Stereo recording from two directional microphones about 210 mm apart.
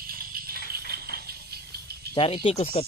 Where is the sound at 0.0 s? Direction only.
45° right (ahead or behind).